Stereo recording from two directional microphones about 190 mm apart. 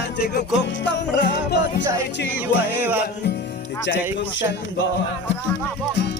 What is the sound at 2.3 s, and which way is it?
Music, 10° right (ahead or behind).